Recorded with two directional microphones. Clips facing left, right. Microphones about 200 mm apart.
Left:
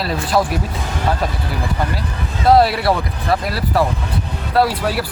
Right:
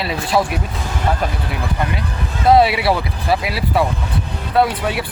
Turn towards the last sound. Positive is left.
turn(degrees=0)  # may be behind; listen again after turning